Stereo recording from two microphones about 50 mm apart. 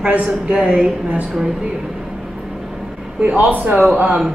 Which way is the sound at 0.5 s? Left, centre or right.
Centre.